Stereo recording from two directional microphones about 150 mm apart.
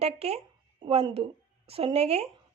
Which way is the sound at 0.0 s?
45° right (ahead or behind).